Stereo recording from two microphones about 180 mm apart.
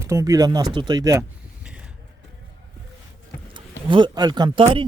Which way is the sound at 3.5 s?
25° right (ahead or behind).